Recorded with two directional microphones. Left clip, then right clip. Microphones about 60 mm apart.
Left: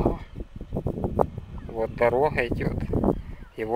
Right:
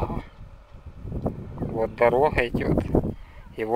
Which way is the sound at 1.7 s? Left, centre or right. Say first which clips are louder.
Right 2 dB; centre.